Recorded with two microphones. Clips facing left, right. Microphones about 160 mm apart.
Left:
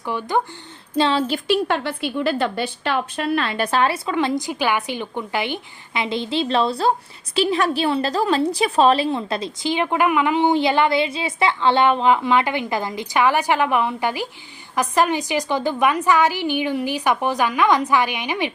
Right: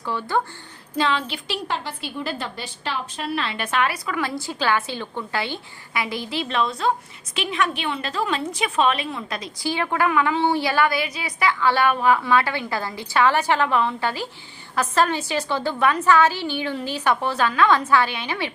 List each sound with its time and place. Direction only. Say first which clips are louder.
0.0 s a woman's voice: left 2 dB; 15° left (ahead or behind)
0.9 s a woman's voice: left 4 dB; 30° left (ahead or behind)
1.3 s a woman's voice: left 8 dB; 55° left (ahead or behind); by 18.5 s 15° left (ahead or behind)